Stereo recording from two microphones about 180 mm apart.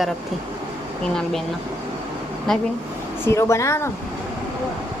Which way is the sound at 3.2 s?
15° left (ahead or behind).